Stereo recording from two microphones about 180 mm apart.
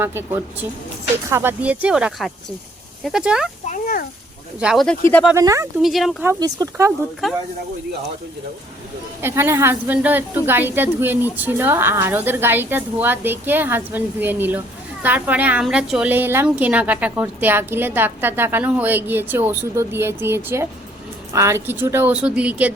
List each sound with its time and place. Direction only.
0.0 s a woman's voice: 15° right (ahead or behind)
3.7 s speech: 50° left (ahead or behind)
4.6 s speech: centre (ahead or behind)
5.3 s a woman's voice: 15° right (ahead or behind)
5.8 s speech: centre (ahead or behind)
6.2 s a woman's voice: 20° right (ahead or behind)
7.2 s speech: centre (ahead or behind)
9.2 s a woman's voice: 15° right (ahead or behind)